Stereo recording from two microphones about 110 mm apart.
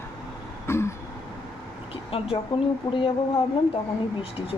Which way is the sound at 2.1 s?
60° left (ahead or behind).